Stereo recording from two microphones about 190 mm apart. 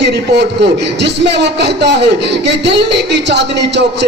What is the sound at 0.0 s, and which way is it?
A man's voice, 65° right (ahead or behind).